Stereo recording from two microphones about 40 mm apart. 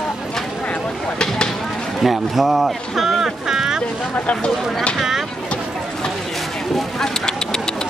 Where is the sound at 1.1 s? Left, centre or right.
Centre.